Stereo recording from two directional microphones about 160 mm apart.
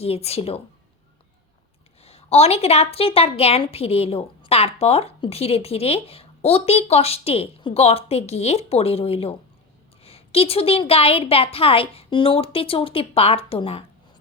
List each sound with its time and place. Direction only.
0.0 s a woman's voice: 40° left (ahead or behind)
2.0 s a woman's voice: 40° left (ahead or behind)